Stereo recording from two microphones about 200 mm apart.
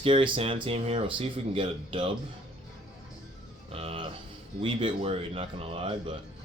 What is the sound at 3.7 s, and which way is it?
Music, 30° right (ahead or behind).